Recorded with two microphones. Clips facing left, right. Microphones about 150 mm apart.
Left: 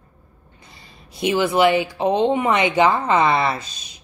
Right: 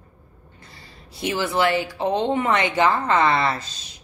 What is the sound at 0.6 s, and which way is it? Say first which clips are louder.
A woman's voice: even; 20° left (ahead or behind).